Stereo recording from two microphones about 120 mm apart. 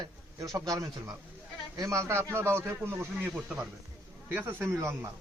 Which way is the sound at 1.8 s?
25° right (ahead or behind).